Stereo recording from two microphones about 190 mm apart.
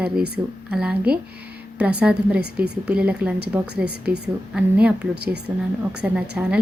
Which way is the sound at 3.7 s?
60° right (ahead or behind).